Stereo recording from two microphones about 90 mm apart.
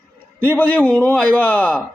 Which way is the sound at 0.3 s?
20° left (ahead or behind).